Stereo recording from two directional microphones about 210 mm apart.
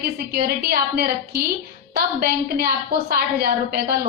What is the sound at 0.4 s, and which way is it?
A woman's voice, 45° right (ahead or behind).